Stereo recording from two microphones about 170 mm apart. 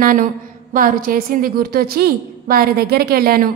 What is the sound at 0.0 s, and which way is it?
A woman's voice, 50° right (ahead or behind).